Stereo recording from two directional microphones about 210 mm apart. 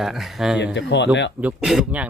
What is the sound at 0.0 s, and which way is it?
Speech, centre (ahead or behind).